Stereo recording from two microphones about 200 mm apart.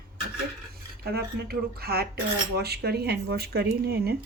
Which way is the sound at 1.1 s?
50° right (ahead or behind).